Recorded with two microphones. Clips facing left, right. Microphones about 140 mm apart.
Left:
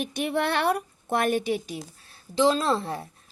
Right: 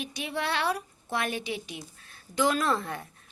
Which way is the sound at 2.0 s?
30° left (ahead or behind).